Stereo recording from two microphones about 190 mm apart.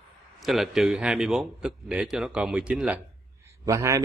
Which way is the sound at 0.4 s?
Centre (ahead or behind).